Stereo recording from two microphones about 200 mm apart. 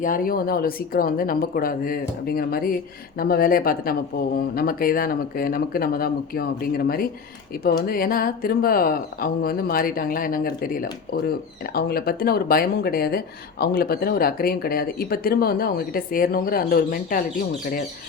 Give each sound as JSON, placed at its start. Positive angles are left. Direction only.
{"t": 0.0, "sound": "speech", "side_deg": 45}